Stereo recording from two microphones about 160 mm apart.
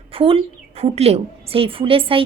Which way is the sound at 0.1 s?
35° right (ahead or behind).